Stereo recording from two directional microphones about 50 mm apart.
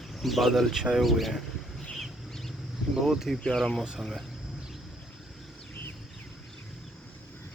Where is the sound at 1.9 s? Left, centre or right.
Centre.